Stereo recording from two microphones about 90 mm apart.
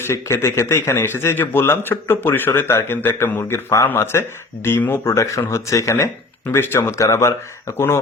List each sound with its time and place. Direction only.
0.1 s a man's voice: 30° left (ahead or behind)